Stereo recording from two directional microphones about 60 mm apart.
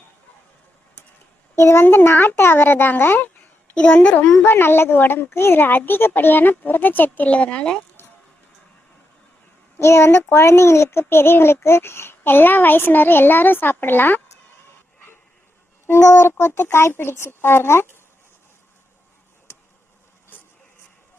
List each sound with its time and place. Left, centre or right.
1.5 s a child's voice: left
1.8 s speech: left
3.8 s a woman's voice: centre
4.4 s speech: left; by 7.8 s centre
9.7 s speech: left
16.0 s speech: left
20.3 s a sound: left